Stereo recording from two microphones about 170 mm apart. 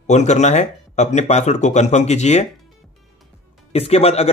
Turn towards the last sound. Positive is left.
turn(degrees=35)  # may be behind; listen again after turning